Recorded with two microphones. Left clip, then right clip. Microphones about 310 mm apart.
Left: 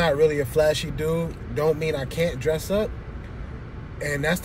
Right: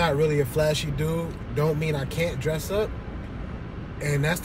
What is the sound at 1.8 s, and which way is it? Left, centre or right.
Speech, centre.